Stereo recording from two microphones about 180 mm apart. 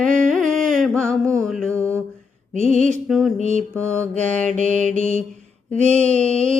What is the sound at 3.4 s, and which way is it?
Mantra, 45° right (ahead or behind).